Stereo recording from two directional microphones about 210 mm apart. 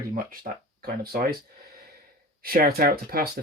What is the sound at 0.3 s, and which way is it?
Speech, 45° right (ahead or behind).